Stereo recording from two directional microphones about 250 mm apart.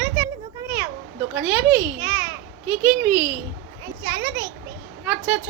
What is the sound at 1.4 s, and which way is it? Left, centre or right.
A child's voice, centre.